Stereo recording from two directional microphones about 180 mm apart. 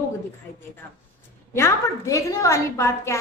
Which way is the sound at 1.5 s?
15° left (ahead or behind).